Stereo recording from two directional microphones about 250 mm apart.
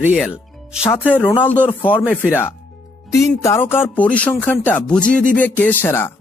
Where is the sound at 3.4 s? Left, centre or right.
Centre.